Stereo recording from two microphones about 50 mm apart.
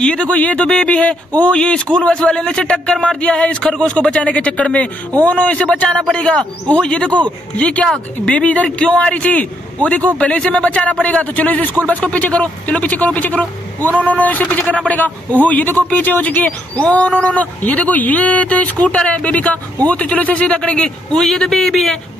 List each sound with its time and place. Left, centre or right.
0.0 s a man's voice: left
16.7 s a man's voice: left
21.4 s speech: centre